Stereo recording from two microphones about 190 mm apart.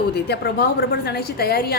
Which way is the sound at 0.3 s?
60° left (ahead or behind).